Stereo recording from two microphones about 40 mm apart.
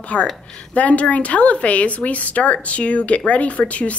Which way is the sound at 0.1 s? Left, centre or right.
Left.